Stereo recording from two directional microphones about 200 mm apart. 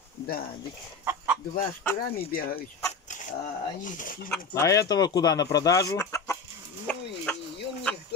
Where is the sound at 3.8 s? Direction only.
40° left (ahead or behind).